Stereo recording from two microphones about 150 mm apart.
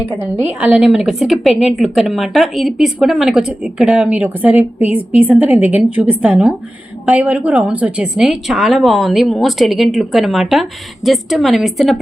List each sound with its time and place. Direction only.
0.2 s a woman's voice: 15° right (ahead or behind)